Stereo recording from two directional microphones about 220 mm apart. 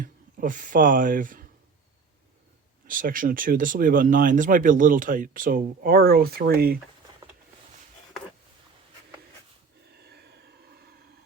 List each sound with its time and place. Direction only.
0.0 s speech: 35° right (ahead or behind)
2.8 s speech: 40° right (ahead or behind)
9.8 s a sound: 50° right (ahead or behind)